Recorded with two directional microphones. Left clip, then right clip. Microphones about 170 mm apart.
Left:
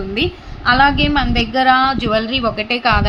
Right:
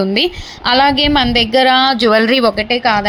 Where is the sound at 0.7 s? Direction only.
25° right (ahead or behind).